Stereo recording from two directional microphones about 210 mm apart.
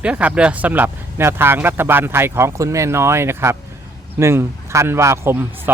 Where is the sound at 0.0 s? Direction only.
5° right (ahead or behind).